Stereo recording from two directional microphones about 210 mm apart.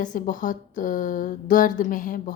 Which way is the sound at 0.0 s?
40° left (ahead or behind).